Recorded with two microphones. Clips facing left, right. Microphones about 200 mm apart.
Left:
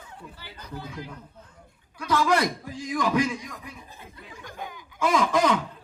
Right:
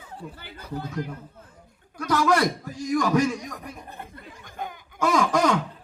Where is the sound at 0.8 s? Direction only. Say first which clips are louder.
Right 7 dB; 50° right (ahead or behind).